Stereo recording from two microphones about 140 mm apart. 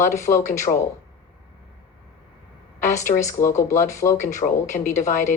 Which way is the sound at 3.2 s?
20° left (ahead or behind).